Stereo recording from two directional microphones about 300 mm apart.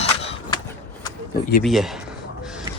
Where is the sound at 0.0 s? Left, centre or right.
Centre.